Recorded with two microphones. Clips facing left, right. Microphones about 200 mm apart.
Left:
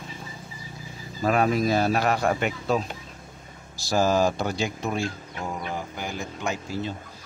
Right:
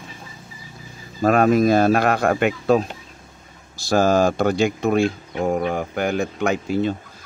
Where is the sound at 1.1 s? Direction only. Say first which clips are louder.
Right 7 dB; 60° right (ahead or behind).